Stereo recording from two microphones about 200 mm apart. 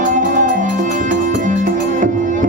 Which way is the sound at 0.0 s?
40° right (ahead or behind).